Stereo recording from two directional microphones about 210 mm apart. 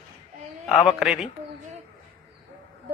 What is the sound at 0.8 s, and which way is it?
Speech, centre (ahead or behind).